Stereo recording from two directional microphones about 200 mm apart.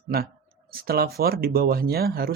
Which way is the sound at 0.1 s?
50° right (ahead or behind).